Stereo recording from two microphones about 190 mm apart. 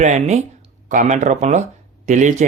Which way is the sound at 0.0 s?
35° right (ahead or behind).